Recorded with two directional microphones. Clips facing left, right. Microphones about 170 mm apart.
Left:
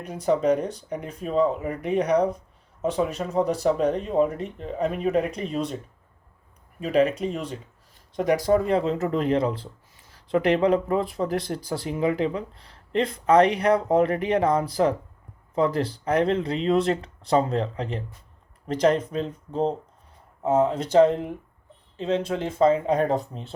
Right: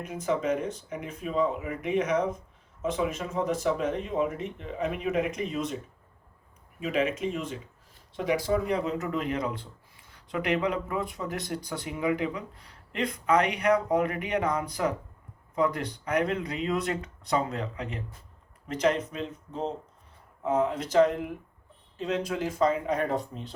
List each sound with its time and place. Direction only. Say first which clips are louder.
0.0 s speech: left 6 dB; 35° left (ahead or behind)
6.7 s speech: left 6 dB; 35° left (ahead or behind)
8.8 s speech: left 6 dB; 30° left (ahead or behind)